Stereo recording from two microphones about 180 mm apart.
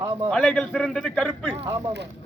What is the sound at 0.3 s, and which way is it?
A man's voice, 5° left (ahead or behind).